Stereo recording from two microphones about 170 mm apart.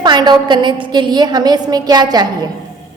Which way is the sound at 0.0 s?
25° right (ahead or behind).